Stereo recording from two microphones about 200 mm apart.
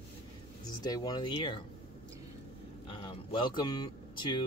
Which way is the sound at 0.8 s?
20° left (ahead or behind).